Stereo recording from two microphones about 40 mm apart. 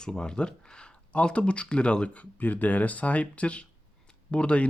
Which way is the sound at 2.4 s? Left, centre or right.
Left.